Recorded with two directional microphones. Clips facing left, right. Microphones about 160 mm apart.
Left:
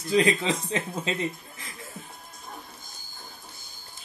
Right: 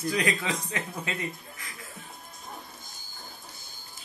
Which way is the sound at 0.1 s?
25° left (ahead or behind).